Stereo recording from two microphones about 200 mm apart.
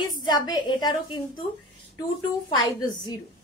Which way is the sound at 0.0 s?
20° left (ahead or behind).